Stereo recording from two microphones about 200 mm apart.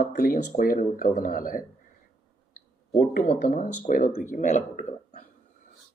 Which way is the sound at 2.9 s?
45° left (ahead or behind).